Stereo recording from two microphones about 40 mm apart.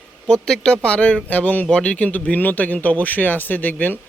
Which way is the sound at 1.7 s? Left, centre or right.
Left.